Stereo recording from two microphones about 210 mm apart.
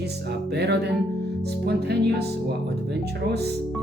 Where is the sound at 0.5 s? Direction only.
50° right (ahead or behind).